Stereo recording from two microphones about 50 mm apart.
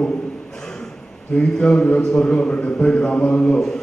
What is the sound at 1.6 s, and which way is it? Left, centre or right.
A man's voice, left.